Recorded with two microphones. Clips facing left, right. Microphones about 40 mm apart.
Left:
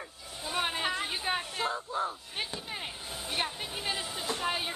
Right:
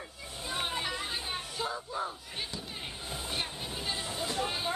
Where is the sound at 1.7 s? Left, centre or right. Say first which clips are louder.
Left 3 dB; centre.